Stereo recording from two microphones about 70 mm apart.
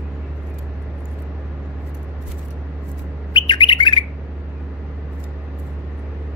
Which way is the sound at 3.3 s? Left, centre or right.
Left.